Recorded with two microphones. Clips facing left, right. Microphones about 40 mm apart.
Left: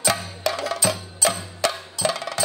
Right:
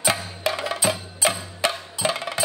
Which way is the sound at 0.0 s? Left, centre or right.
Right.